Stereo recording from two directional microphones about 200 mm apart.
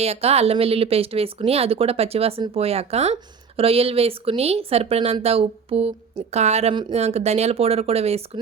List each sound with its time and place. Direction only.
0.0 s speech: 30° right (ahead or behind)